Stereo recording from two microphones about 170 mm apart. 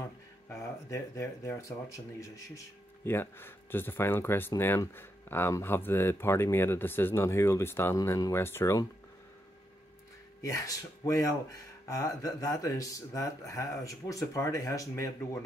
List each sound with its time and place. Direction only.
0.5 s speech: 15° left (ahead or behind)
10.4 s speech: 20° left (ahead or behind)